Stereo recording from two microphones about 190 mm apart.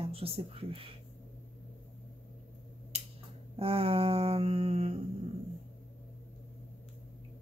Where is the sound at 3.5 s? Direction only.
30° right (ahead or behind).